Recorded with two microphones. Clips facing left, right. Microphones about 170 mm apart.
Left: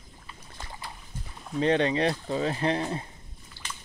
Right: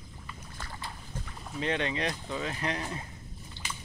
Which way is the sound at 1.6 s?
35° left (ahead or behind).